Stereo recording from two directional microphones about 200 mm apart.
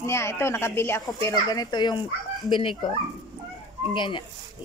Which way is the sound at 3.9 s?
25° left (ahead or behind).